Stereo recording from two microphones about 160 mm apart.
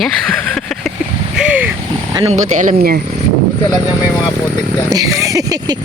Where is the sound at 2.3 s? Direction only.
50° right (ahead or behind).